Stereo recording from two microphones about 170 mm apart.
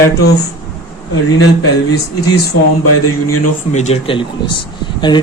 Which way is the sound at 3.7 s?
40° left (ahead or behind).